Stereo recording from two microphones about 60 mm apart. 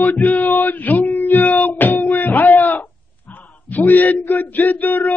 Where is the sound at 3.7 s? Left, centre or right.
Left.